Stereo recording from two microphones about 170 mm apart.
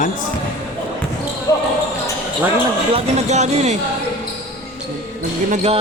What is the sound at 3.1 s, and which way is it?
Speech, 40° right (ahead or behind).